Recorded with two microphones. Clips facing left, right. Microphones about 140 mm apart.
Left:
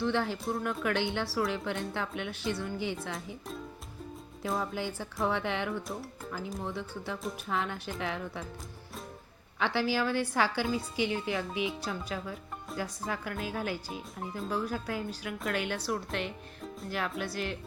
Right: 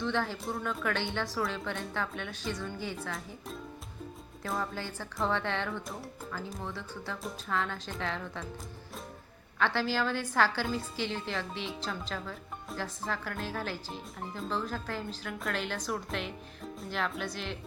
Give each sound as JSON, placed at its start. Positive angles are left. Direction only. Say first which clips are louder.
{"t": 0.0, "sound": "a woman's voice", "louder": "left 2 dB", "side_deg": 15}
{"t": 4.4, "sound": "a woman's voice", "louder": "left 2 dB", "side_deg": 20}
{"t": 9.6, "sound": "a woman's voice", "louder": "left 1 dB", "side_deg": 15}